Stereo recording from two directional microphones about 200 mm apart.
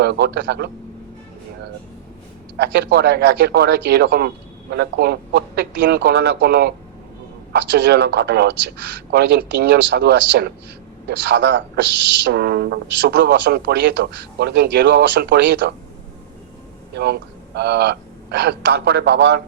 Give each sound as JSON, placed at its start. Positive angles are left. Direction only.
{"t": 0.0, "sound": "speech", "side_deg": -55}
{"t": 2.6, "sound": "speech", "side_deg": -55}
{"t": 16.9, "sound": "a man's voice", "side_deg": -55}